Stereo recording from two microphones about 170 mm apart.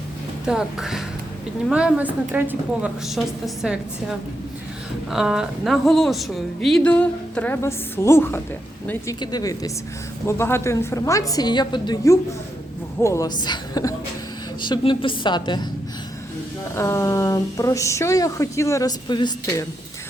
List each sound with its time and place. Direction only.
0.4 s a woman's voice: 5° right (ahead or behind)
5.1 s a woman's voice: 5° right (ahead or behind); by 15.6 s 25° left (ahead or behind)
16.7 s speech: 15° left (ahead or behind)